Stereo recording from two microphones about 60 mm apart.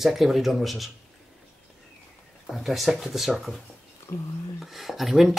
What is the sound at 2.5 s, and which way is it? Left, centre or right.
Speech, centre.